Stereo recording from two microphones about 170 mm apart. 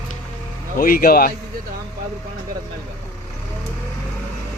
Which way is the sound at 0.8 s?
55° left (ahead or behind).